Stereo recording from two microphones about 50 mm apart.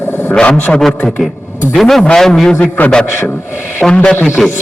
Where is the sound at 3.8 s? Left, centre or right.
Centre.